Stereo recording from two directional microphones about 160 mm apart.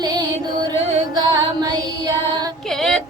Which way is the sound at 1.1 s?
25° right (ahead or behind).